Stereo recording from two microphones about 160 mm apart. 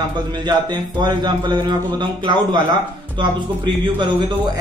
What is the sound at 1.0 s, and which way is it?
A man's voice, 25° right (ahead or behind).